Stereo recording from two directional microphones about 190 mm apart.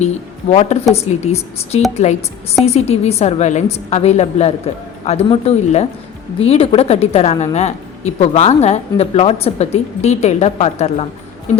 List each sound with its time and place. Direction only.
0.5 s a woman's voice: 35° left (ahead or behind)